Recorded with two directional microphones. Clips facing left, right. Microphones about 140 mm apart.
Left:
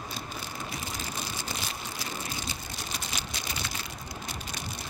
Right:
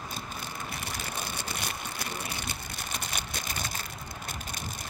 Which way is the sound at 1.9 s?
60° right (ahead or behind).